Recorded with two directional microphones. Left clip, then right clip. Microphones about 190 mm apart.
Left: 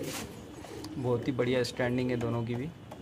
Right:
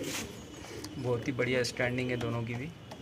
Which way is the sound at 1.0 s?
15° left (ahead or behind).